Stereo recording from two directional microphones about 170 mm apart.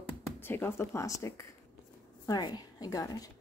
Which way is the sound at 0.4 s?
15° left (ahead or behind).